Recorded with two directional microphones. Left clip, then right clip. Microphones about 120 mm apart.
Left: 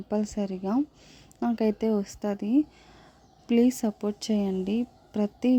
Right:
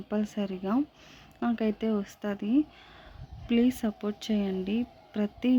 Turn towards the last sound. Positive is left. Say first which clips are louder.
# left 2 dB
turn(degrees=30)  # may be behind; listen again after turning